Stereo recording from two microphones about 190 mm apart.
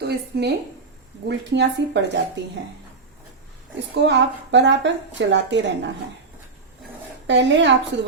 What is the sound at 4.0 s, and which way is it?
A woman's voice, 65° right (ahead or behind).